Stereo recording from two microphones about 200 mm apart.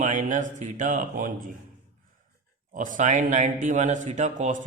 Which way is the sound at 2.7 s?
40° right (ahead or behind).